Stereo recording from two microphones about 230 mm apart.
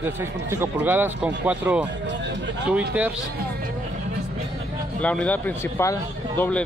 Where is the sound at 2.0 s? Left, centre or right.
Right.